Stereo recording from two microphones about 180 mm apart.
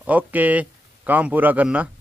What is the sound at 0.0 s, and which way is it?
Speech, 10° right (ahead or behind).